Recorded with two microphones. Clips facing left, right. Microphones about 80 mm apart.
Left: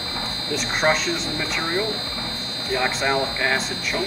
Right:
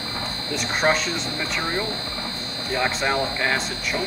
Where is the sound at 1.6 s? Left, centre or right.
Right.